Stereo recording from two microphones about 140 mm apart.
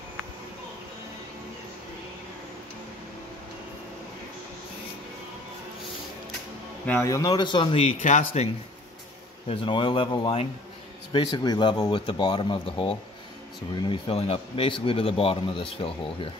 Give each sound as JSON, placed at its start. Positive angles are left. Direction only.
{"t": 6.9, "sound": "speech", "side_deg": 20}
{"t": 8.0, "sound": "speech", "side_deg": 65}
{"t": 9.5, "sound": "speech", "side_deg": 35}